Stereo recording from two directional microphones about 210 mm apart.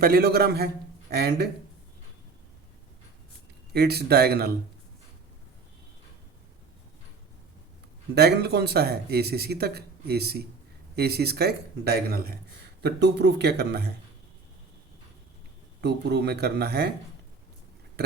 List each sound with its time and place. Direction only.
0.0 s speech: 45° right (ahead or behind)
3.7 s speech: 50° right (ahead or behind)
8.1 s speech: 50° right (ahead or behind)
15.8 s speech: 55° right (ahead or behind)